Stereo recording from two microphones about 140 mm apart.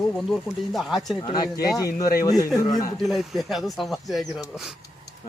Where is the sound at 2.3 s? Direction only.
25° left (ahead or behind).